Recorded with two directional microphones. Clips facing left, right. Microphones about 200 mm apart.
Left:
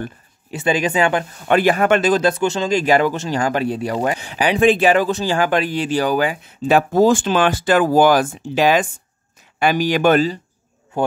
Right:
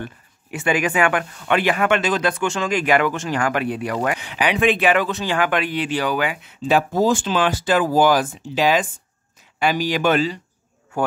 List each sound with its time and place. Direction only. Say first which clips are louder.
0.5 s speech: left 2 dB; 30° left (ahead or behind)
6.9 s speech: left 4 dB; 60° left (ahead or behind); by 10.4 s 45° left (ahead or behind)